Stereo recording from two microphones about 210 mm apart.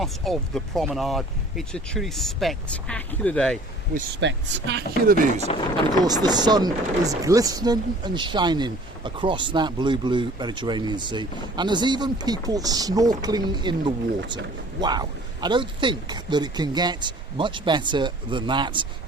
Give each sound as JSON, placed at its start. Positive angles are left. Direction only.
{"t": 0.0, "sound": "speech", "side_deg": 0}
{"t": 4.2, "sound": "speech", "side_deg": -60}
{"t": 5.5, "sound": "speech", "side_deg": 20}
{"t": 6.1, "sound": "speech", "side_deg": -20}